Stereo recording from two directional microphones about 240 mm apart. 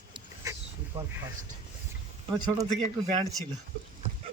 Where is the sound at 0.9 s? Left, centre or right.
Centre.